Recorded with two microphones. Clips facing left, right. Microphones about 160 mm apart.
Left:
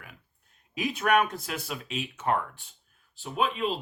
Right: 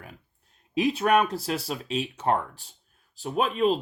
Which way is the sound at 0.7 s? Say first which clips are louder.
Right 3 dB; 30° right (ahead or behind).